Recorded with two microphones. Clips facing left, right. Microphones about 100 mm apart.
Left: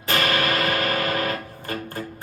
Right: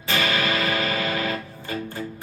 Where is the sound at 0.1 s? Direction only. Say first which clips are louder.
Left 1 dB; 55° left (ahead or behind).